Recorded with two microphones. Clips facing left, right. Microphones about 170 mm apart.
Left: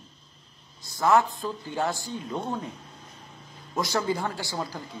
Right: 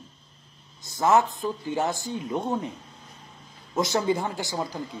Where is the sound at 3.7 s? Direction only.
20° right (ahead or behind).